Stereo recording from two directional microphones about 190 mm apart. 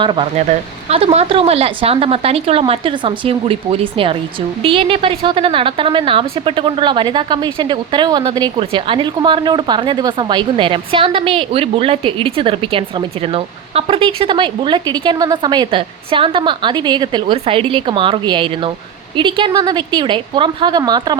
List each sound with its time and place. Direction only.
0.0 s a woman's voice: 25° right (ahead or behind)